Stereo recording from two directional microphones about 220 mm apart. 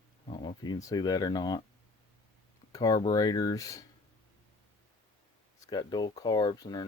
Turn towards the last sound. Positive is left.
turn(degrees=20)  # may be behind; listen again after turning